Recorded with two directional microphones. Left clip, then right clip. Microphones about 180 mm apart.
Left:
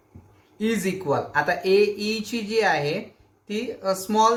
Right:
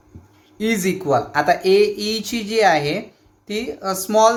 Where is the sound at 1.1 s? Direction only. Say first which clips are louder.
Right 6 dB; 35° right (ahead or behind).